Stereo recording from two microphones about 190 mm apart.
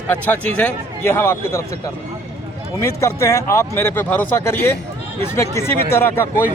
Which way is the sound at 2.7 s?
15° left (ahead or behind).